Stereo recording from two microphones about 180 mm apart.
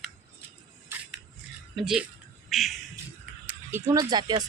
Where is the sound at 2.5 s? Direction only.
Centre (ahead or behind).